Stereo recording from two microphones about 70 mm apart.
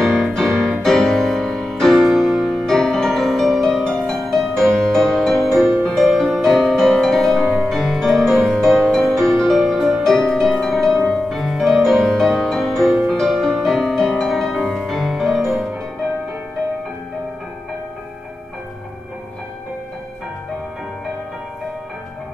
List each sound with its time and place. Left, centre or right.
0.0 s music: centre
5.6 s music: right
5.9 s music: centre